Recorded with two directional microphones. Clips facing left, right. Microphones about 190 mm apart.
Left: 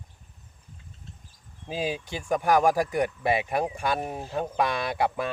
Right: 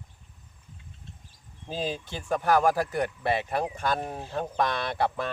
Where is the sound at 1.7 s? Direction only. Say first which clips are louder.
Left 2 dB; 10° left (ahead or behind).